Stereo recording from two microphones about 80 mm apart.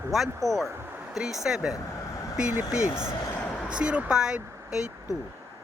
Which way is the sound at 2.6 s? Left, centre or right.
Left.